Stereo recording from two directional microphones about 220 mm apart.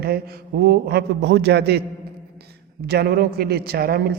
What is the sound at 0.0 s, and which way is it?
A woman's voice, 45° right (ahead or behind).